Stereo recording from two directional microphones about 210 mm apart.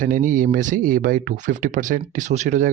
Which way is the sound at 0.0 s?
40° right (ahead or behind).